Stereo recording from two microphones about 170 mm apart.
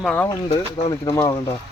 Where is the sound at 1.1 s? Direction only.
15° left (ahead or behind).